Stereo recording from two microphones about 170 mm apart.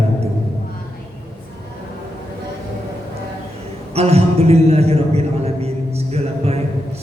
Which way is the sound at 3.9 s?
40° right (ahead or behind).